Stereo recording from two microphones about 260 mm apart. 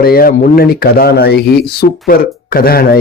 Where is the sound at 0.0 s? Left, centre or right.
Left.